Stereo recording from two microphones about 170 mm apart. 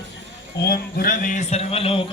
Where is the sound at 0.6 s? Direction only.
65° left (ahead or behind); by 2.0 s 35° left (ahead or behind).